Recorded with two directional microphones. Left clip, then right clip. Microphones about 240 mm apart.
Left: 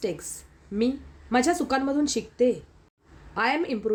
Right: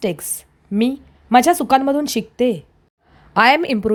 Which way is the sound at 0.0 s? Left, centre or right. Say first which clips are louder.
Right 7 dB; right.